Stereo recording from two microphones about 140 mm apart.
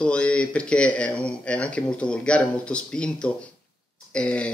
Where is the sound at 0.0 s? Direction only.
10° left (ahead or behind).